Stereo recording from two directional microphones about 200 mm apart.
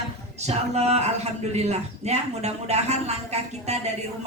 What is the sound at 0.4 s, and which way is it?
A man's voice, 35° right (ahead or behind).